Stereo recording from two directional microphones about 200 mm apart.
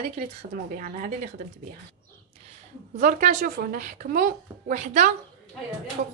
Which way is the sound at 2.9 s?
40° right (ahead or behind).